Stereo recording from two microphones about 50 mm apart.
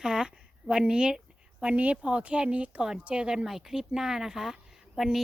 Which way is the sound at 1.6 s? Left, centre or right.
Right.